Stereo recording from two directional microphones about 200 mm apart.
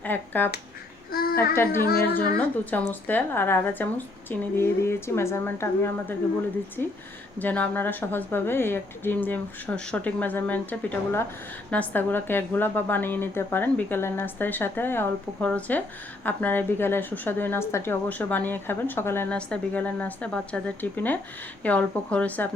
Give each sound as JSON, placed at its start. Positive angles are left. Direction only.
{"t": 0.0, "sound": "finger snapping", "side_deg": 10}
{"t": 1.1, "sound": "babbling", "side_deg": 50}
{"t": 1.8, "sound": "speech", "side_deg": 50}
{"t": 2.6, "sound": "a woman's voice", "side_deg": 10}
{"t": 7.3, "sound": "a woman's voice", "side_deg": 10}